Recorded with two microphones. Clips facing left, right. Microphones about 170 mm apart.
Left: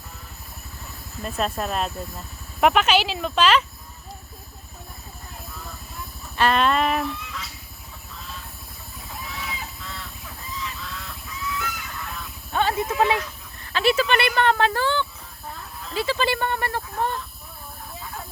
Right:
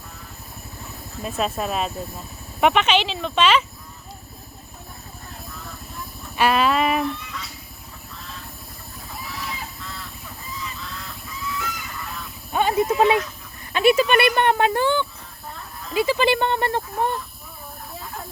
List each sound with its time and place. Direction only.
1.2 s speech: 5° right (ahead or behind)
6.3 s goose: 10° right (ahead or behind)
8.1 s vehicle: centre (ahead or behind)
9.0 s goose: centre (ahead or behind)
12.5 s a sound: 15° right (ahead or behind)
14.2 s speech: 20° right (ahead or behind)
16.9 s speech: 15° right (ahead or behind)